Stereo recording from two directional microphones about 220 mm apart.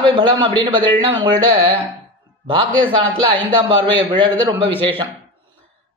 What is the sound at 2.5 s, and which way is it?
A man's voice, 25° right (ahead or behind).